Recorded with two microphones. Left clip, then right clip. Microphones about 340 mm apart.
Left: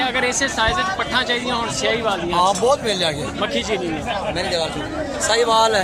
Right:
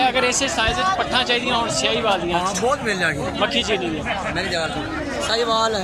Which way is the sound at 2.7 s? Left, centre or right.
Centre.